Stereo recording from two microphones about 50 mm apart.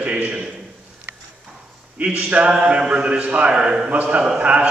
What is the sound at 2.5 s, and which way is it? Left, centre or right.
A man's voice, centre.